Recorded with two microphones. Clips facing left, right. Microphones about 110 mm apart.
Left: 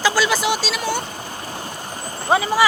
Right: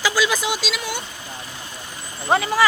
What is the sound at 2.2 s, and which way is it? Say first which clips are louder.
Speech: left 1 dB; 10° left (ahead or behind).